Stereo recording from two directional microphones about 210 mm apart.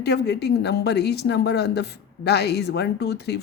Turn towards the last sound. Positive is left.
turn(degrees=50)  # may be behind; listen again after turning